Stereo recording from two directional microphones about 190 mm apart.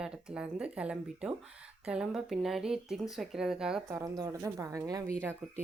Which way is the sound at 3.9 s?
20° right (ahead or behind).